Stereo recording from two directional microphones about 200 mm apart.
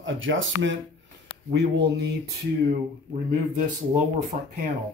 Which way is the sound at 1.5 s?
60° right (ahead or behind).